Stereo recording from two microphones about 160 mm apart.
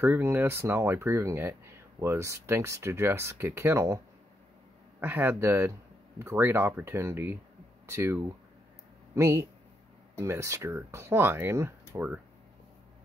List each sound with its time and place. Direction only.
0.0 s speech: 10° right (ahead or behind)
5.0 s speech: 15° right (ahead or behind)